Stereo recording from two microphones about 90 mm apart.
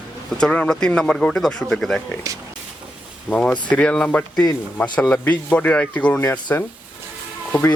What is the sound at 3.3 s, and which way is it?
Speech, 15° left (ahead or behind).